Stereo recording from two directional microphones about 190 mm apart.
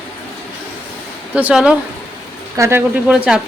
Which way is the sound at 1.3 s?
5° right (ahead or behind).